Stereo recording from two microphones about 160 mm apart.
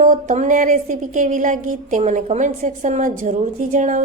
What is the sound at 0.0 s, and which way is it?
A woman's voice, 50° right (ahead or behind).